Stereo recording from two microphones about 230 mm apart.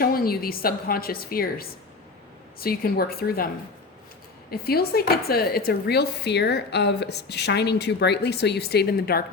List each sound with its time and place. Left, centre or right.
0.0 s a woman's voice: left
4.6 s speech: left